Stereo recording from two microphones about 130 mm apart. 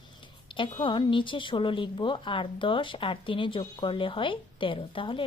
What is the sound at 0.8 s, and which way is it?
A woman's voice, 40° left (ahead or behind).